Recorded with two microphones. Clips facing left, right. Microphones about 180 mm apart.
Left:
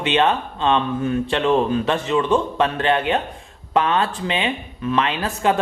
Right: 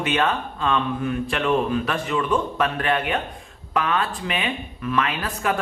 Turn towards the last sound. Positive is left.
turn(degrees=25)  # may be behind; listen again after turning